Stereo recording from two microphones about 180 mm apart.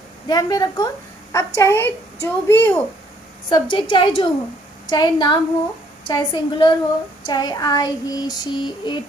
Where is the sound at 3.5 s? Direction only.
25° left (ahead or behind).